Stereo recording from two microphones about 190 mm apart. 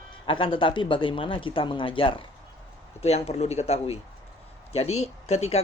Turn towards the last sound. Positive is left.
turn(degrees=35)  # may be behind; listen again after turning